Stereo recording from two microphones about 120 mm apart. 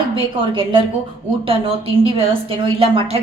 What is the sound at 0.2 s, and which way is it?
A woman's voice, 45° right (ahead or behind).